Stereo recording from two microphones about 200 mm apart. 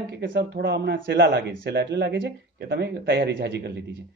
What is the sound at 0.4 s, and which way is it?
Speech, 60° right (ahead or behind).